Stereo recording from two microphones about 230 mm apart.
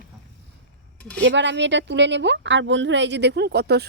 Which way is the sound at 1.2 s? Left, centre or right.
Right.